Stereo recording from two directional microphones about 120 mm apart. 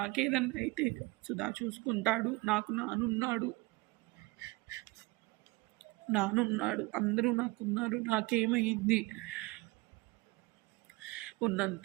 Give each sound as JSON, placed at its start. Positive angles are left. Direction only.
{"t": 0.0, "sound": "speech", "side_deg": -5}
{"t": 3.2, "sound": "a man's voice", "side_deg": -25}
{"t": 6.1, "sound": "speech", "side_deg": -10}
{"t": 11.0, "sound": "a sound", "side_deg": -10}